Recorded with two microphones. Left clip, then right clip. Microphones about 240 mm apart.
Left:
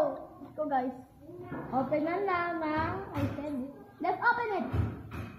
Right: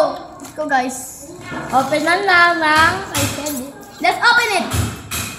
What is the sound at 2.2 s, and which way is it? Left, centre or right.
Speech, right.